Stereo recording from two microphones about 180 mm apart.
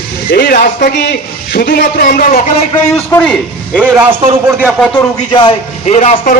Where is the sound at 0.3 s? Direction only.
65° left (ahead or behind).